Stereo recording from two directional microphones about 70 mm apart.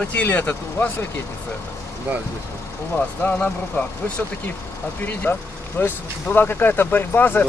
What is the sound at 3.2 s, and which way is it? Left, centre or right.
Speech, left.